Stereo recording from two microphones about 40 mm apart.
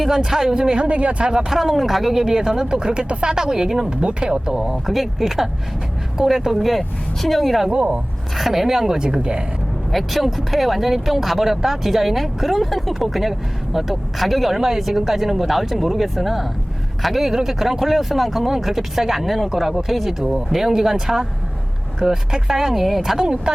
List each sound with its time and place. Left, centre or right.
0.0 s speech: centre; by 1.3 s right
1.3 s speech: centre
1.5 s speech: centre; by 3.3 s right
3.3 s speech: centre
3.8 s speech: right
4.9 s speech: centre
6.7 s speech: centre
7.7 s speech: right
8.4 s speech: centre; by 9.4 s right
9.9 s speech: centre